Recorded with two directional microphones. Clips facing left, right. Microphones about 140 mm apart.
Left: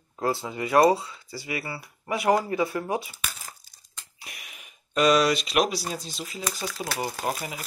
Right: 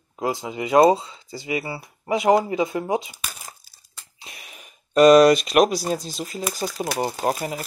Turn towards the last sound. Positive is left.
turn(degrees=-40)  # may be behind; listen again after turning